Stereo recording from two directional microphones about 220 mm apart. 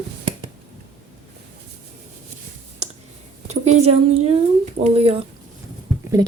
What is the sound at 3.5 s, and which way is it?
Speech, 30° right (ahead or behind).